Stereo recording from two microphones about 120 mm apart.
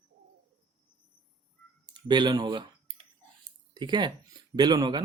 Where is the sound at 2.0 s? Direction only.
40° right (ahead or behind).